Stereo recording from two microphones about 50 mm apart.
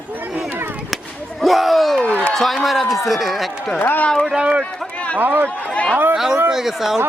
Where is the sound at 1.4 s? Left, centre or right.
Centre.